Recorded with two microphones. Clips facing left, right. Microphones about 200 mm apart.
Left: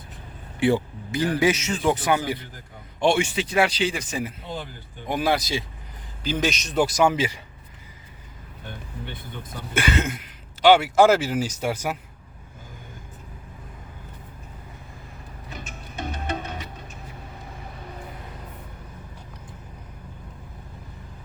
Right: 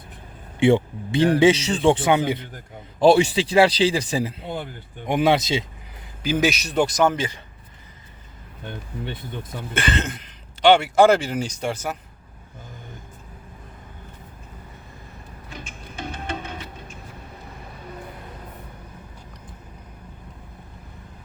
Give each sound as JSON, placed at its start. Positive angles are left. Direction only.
{"t": 0.6, "sound": "speech", "side_deg": -25}
{"t": 3.0, "sound": "speech", "side_deg": -35}
{"t": 4.3, "sound": "speech", "side_deg": -60}
{"t": 5.0, "sound": "speech", "side_deg": -25}
{"t": 6.2, "sound": "a man's voice", "side_deg": -5}
{"t": 6.7, "sound": "speech", "side_deg": 5}
{"t": 9.7, "sound": "speech", "side_deg": 10}